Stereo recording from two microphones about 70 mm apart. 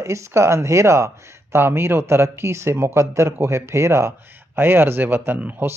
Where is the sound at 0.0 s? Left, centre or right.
Right.